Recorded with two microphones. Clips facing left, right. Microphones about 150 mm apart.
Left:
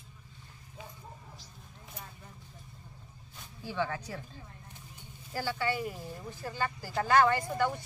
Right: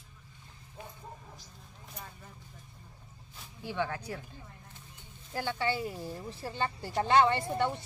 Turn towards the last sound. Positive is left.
turn(degrees=-25)  # may be behind; listen again after turning